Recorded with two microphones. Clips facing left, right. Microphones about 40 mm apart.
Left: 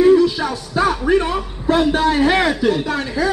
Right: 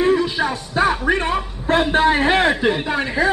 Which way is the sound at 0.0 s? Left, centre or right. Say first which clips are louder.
Left 5 dB; right.